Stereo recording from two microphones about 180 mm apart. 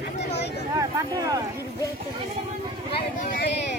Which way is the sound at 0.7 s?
20° right (ahead or behind).